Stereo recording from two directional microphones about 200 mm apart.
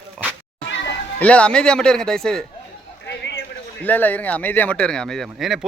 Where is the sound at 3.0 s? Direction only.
60° left (ahead or behind).